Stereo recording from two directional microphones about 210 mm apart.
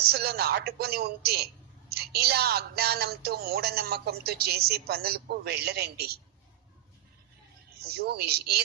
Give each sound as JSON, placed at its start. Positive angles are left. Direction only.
{"t": 0.1, "sound": "a woman's voice", "side_deg": -50}
{"t": 7.8, "sound": "speech", "side_deg": -50}